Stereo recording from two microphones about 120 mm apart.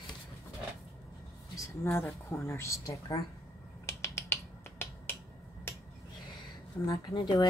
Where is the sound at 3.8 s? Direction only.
25° left (ahead or behind).